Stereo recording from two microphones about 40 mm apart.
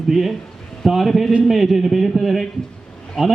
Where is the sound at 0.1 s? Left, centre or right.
Centre.